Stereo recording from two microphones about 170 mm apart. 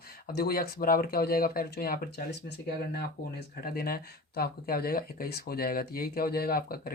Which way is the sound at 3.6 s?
60° left (ahead or behind).